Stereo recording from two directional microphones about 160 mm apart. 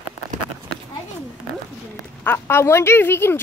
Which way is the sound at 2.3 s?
15° left (ahead or behind).